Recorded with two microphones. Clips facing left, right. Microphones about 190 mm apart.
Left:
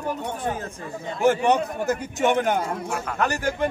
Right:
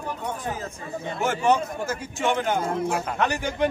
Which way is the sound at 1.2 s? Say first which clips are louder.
Left 3 dB; 20° left (ahead or behind).